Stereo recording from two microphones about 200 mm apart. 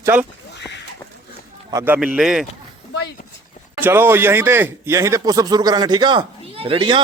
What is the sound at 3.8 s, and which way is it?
A man's voice, 10° right (ahead or behind).